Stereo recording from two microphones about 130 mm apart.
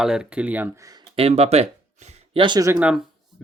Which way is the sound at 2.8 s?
10° right (ahead or behind).